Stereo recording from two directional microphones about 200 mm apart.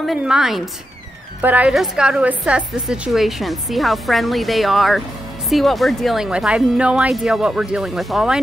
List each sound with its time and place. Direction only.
0.0 s a woman's voice: 5° right (ahead or behind)